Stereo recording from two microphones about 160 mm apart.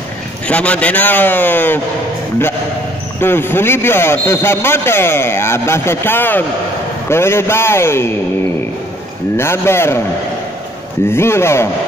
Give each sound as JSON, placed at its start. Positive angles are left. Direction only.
{"t": 0.5, "sound": "a man's voice", "side_deg": 10}
{"t": 3.2, "sound": "a man's voice", "side_deg": 15}
{"t": 9.4, "sound": "a man's voice", "side_deg": 15}
{"t": 11.1, "sound": "a man's voice", "side_deg": 15}